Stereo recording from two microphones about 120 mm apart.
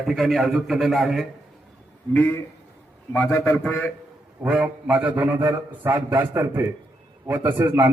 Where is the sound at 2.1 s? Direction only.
15° left (ahead or behind).